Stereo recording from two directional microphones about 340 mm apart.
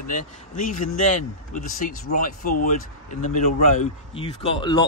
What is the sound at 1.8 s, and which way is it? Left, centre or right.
Speech, left.